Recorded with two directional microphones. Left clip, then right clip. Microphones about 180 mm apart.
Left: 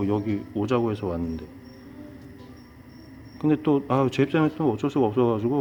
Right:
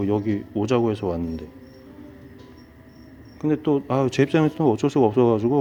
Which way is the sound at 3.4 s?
Centre (ahead or behind).